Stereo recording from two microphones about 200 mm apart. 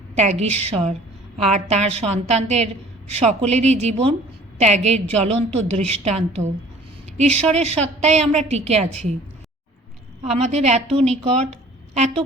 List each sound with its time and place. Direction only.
0.2 s a woman's voice: 35° right (ahead or behind)
10.3 s a woman's voice: 35° right (ahead or behind)